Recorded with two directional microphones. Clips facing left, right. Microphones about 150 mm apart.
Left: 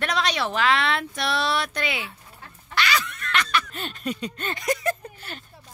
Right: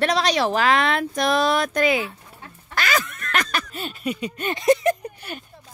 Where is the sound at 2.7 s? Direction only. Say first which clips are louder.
Right 1 dB; 45° right (ahead or behind).